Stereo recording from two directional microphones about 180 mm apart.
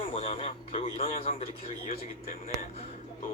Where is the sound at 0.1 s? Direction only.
30° left (ahead or behind).